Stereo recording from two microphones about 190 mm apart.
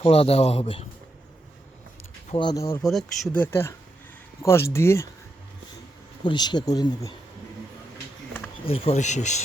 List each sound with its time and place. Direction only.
0.0 s a man's voice: 30° left (ahead or behind)
2.3 s speech: 25° left (ahead or behind)
2.8 s speech: 5° left (ahead or behind)
6.2 s speech: 25° left (ahead or behind)
8.6 s a man's voice: 30° left (ahead or behind)